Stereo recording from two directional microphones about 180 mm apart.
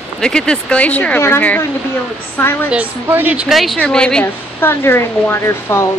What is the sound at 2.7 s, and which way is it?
Speech, 10° right (ahead or behind).